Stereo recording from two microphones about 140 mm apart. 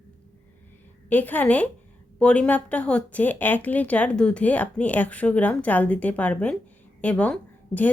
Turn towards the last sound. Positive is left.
turn(degrees=10)  # may be behind; listen again after turning